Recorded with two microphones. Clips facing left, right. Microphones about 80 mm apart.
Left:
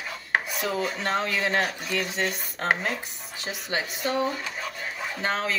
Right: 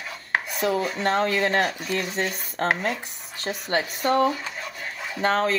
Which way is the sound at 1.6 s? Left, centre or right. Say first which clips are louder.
Right 2 dB; centre.